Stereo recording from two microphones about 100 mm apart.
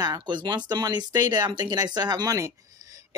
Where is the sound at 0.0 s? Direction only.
45° right (ahead or behind).